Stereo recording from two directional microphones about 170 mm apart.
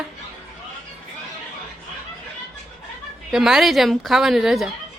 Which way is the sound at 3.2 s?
5° right (ahead or behind).